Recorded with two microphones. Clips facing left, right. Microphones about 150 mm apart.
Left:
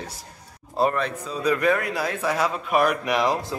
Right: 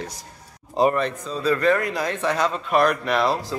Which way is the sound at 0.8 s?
10° right (ahead or behind).